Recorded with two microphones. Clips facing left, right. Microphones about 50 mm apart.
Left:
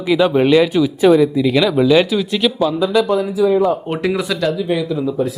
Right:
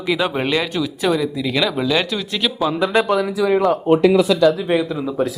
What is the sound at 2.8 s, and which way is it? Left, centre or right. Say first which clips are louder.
Speech: left 1 dB; right.